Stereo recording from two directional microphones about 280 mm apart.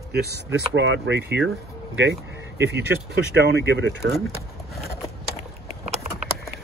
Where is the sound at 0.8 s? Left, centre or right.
Right.